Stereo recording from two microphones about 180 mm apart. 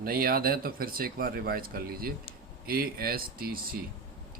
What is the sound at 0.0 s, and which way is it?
Speech, 55° right (ahead or behind).